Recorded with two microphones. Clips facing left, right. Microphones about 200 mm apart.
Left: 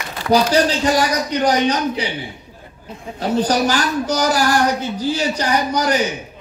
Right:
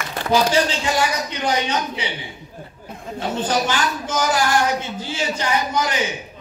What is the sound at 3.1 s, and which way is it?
A woman's voice, 40° left (ahead or behind).